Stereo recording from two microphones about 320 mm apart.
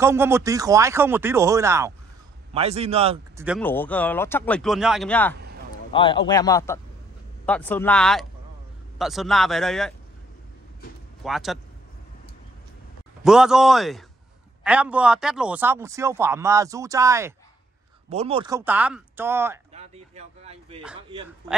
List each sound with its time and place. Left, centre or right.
0.0 s a man's voice: centre
3.4 s speech: centre
5.3 s a sound: right
5.9 s a man's voice: centre
11.2 s speech: centre
13.2 s a man's voice: centre
19.7 s a sound: centre